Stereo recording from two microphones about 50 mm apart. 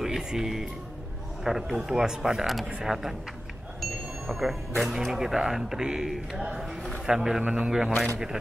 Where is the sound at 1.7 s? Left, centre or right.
Centre.